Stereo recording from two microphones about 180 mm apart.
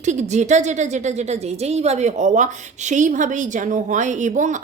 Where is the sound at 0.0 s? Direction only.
40° right (ahead or behind).